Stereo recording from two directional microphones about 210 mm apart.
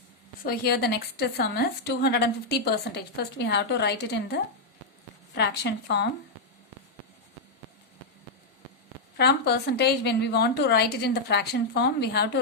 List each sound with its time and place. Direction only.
0.4 s a woman's voice: 50° left (ahead or behind)
9.1 s a woman's voice: 50° left (ahead or behind)